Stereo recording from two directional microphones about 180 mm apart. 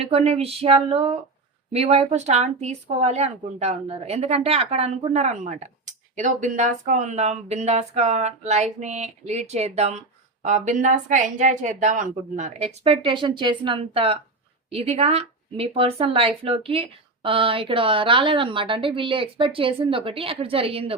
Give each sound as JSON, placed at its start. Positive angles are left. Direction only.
{"t": 0.0, "sound": "a woman's voice", "side_deg": -35}